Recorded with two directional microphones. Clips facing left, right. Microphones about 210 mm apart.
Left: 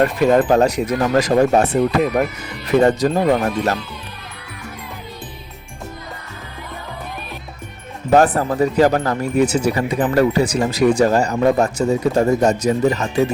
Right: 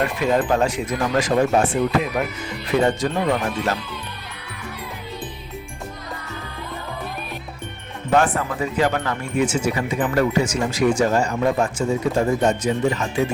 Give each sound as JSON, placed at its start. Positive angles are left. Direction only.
{"t": 0.0, "sound": "speech", "side_deg": 45}
{"t": 8.1, "sound": "speech", "side_deg": 40}